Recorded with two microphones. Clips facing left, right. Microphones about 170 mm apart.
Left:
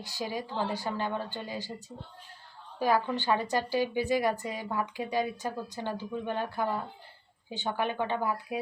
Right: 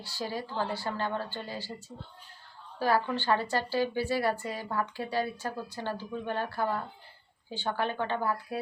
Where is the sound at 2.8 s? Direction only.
15° left (ahead or behind).